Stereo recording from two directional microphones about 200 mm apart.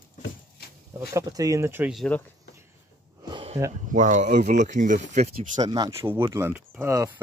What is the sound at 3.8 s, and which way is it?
Speech, 40° right (ahead or behind).